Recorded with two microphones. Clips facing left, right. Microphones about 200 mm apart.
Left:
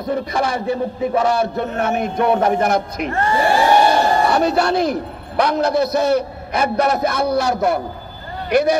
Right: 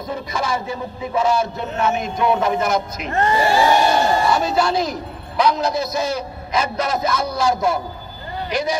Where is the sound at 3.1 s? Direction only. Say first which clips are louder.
Right 1 dB; 15° right (ahead or behind).